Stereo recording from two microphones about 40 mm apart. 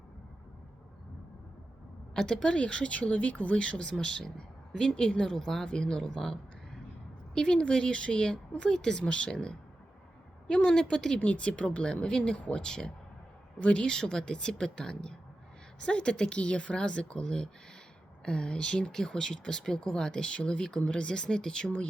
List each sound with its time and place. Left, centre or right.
2.1 s speech: left
3.6 s a woman's voice: left
7.3 s speech: left
10.7 s a woman's voice: centre
11.2 s a woman's voice: left; by 19.7 s centre
19.7 s speech: left